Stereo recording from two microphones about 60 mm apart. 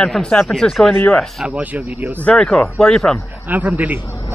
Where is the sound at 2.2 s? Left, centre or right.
Centre.